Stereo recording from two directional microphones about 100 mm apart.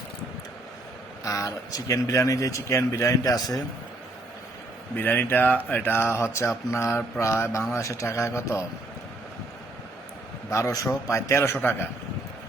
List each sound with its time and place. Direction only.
1.2 s speech: 35° left (ahead or behind)
4.9 s speech: 20° left (ahead or behind)
10.5 s speech: 35° left (ahead or behind)